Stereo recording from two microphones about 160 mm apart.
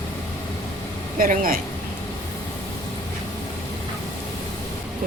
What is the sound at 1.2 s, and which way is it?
Speech, 60° right (ahead or behind).